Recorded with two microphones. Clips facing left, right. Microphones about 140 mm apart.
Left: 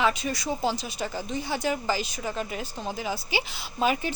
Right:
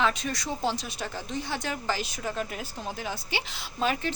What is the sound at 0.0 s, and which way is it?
Speech, 5° left (ahead or behind).